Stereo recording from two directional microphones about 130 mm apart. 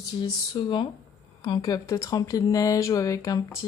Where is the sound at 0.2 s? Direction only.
35° left (ahead or behind).